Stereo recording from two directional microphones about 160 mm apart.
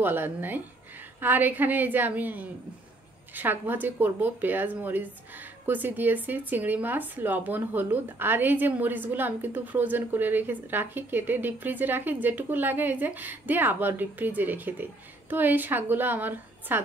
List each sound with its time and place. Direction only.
0.0 s a woman's voice: 10° right (ahead or behind)